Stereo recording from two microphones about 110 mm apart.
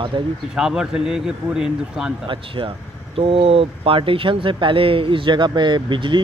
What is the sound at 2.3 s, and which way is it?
Speech, 50° right (ahead or behind).